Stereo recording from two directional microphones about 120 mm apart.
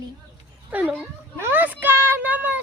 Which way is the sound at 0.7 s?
10° right (ahead or behind).